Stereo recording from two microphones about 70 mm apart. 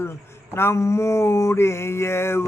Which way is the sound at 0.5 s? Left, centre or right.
Left.